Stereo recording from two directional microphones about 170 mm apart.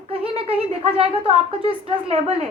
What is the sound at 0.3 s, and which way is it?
A woman's voice, 35° right (ahead or behind).